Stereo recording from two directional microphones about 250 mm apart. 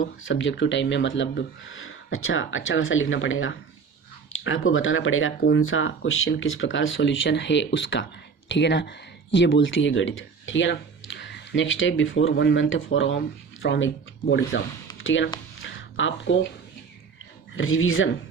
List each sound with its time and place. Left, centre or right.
0.0 s speech: left
15.6 s a sound: left
17.5 s speech: left